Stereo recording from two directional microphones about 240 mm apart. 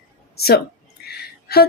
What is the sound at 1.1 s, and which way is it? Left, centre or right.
Music, left.